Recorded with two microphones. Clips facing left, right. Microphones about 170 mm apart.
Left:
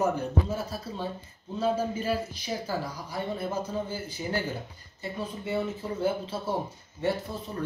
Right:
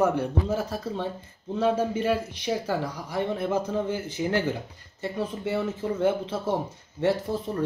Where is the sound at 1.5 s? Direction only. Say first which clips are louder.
Right 3 dB; 75° right (ahead or behind).